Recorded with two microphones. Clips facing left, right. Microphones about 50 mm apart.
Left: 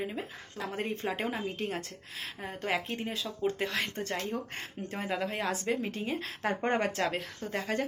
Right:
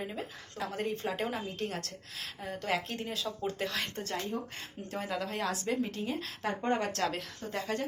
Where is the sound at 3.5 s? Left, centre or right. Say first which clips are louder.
Left 5 dB; left.